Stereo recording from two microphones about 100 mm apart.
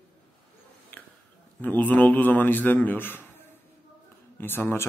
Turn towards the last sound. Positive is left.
turn(degrees=25)  # may be behind; listen again after turning